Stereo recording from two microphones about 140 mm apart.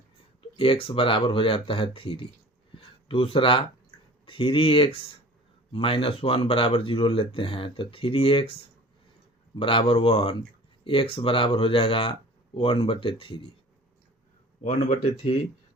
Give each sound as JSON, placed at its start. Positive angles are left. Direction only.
{"t": 0.5, "sound": "speech", "side_deg": 40}
{"t": 9.6, "sound": "speech", "side_deg": 40}
{"t": 14.6, "sound": "speech", "side_deg": 55}